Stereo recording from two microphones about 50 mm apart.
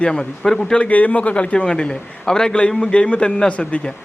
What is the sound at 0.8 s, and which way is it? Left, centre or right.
A man's voice, left.